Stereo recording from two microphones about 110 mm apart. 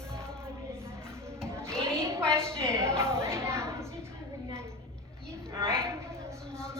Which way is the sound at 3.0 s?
25° right (ahead or behind).